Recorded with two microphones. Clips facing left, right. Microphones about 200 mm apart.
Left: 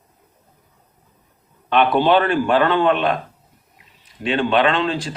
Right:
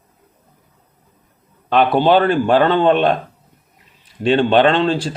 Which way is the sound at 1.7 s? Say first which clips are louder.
Right 2 dB; 35° right (ahead or behind).